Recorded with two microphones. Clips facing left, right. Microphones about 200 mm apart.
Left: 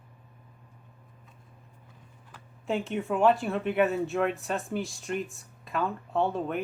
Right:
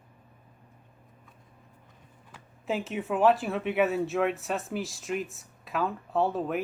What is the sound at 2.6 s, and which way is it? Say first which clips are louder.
Speech: left 1 dB; centre (ahead or behind).